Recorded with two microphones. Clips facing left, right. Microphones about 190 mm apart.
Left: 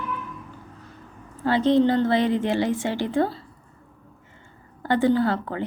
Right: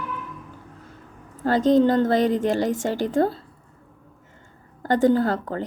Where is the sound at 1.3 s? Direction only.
45° right (ahead or behind).